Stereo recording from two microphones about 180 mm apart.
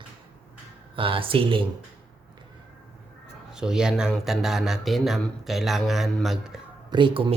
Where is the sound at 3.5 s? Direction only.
5° right (ahead or behind).